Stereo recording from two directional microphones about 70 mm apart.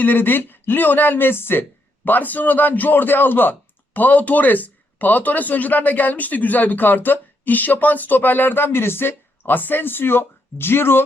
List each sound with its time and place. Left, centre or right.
0.0 s speech: left